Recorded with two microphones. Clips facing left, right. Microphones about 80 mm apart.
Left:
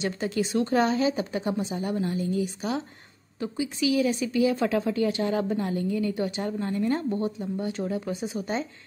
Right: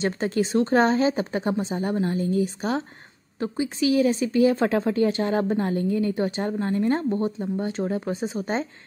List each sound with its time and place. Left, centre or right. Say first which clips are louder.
0.0 s speech: right 4 dB; right